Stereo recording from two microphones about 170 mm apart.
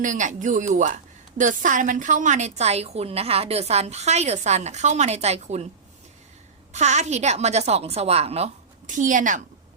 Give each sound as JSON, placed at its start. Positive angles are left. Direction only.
{"t": 0.0, "sound": "a woman's voice", "side_deg": -45}
{"t": 6.7, "sound": "a woman's voice", "side_deg": -40}
{"t": 8.9, "sound": "a woman's voice", "side_deg": -50}